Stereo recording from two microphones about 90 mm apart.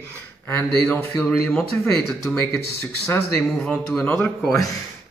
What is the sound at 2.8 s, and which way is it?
Speech, 30° left (ahead or behind).